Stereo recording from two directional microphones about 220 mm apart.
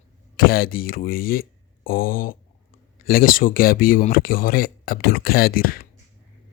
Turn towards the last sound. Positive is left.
turn(degrees=40)  # may be behind; listen again after turning